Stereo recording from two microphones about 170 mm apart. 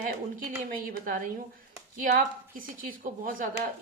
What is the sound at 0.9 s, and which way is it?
Speech, 55° right (ahead or behind).